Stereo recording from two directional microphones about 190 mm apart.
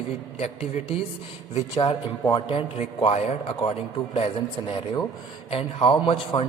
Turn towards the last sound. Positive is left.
turn(degrees=30)  # may be behind; listen again after turning